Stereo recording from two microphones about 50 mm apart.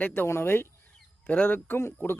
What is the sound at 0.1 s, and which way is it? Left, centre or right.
Speech, left.